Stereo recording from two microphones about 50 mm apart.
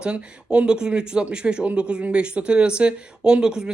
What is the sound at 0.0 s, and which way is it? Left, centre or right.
Speech, right.